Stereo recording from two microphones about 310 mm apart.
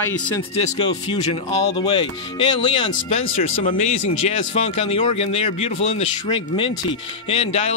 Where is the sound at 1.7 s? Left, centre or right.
Centre.